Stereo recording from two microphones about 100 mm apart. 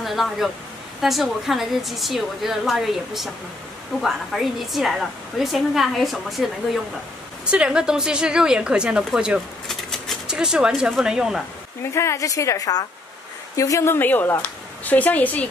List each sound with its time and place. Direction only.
0.0 s a woman's voice: centre (ahead or behind)
9.7 s rodents: centre (ahead or behind)
10.2 s a woman's voice: 5° right (ahead or behind)
11.9 s a woman's voice: 30° left (ahead or behind)